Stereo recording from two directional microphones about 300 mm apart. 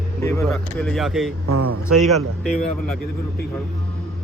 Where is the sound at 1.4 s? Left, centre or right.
Right.